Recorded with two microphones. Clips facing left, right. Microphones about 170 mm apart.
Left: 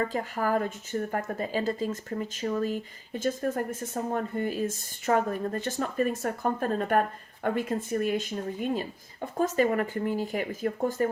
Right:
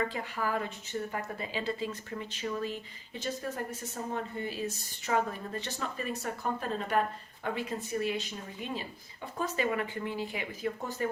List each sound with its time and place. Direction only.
0.0 s speech: 45° left (ahead or behind)